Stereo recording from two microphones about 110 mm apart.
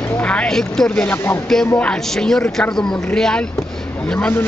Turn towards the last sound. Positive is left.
turn(degrees=15)  # may be behind; listen again after turning